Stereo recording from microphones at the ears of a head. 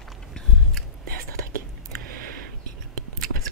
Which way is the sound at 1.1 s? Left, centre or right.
Right.